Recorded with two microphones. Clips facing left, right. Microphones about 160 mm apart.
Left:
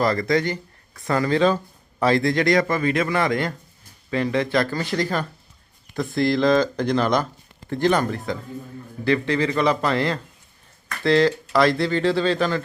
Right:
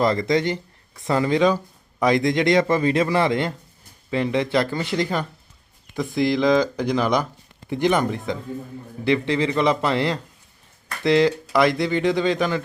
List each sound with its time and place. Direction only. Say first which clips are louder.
0.0 s speech: right 1 dB; 20° right (ahead or behind)